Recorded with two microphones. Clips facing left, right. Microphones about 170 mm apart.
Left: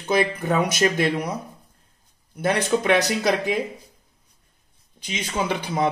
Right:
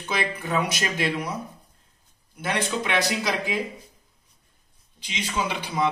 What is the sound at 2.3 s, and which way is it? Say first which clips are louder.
Speech: left 6 dB; 40° left (ahead or behind).